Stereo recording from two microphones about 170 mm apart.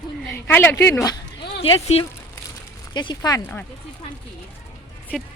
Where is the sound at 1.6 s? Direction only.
35° left (ahead or behind).